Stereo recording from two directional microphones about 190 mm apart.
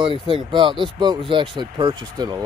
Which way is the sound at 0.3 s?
25° right (ahead or behind).